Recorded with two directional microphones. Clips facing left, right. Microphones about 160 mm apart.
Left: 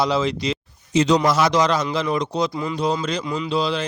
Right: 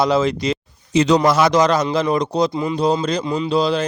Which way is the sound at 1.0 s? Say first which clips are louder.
Right 3 dB; 60° right (ahead or behind).